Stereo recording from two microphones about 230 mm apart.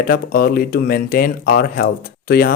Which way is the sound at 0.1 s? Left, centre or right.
Left.